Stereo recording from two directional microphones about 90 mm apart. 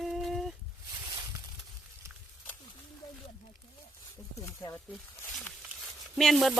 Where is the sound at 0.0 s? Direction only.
Centre (ahead or behind).